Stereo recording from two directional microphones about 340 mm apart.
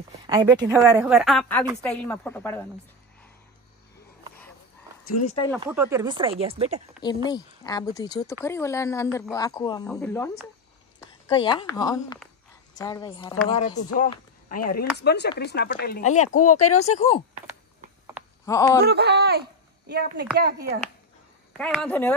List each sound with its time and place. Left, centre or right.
0.3 s a woman's voice: centre
5.2 s speech: centre
5.7 s speech: centre
7.2 s a woman's voice: centre
13.9 s a sound: left
15.0 s speech: left
16.3 s speech: left
16.7 s speech: centre
18.4 s speech: centre
18.9 s speech: right
21.5 s a woman's voice: centre